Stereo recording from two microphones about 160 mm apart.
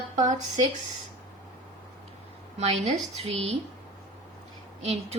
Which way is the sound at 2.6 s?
45° right (ahead or behind).